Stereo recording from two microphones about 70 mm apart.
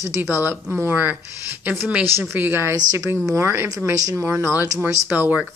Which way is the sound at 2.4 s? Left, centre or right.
Right.